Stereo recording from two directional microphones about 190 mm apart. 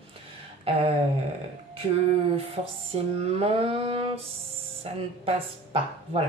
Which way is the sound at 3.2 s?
30° right (ahead or behind).